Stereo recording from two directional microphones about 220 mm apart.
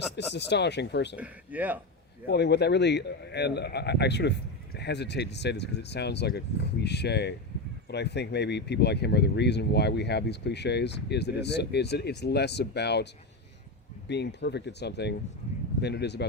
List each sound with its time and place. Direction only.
0.2 s speech: 50° left (ahead or behind)
1.1 s speech: 5° right (ahead or behind)
2.2 s speech: 50° left (ahead or behind)
14.1 s speech: 50° left (ahead or behind)